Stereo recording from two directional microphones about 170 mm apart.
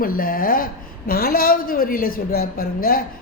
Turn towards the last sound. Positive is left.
turn(degrees=60)  # may be behind; listen again after turning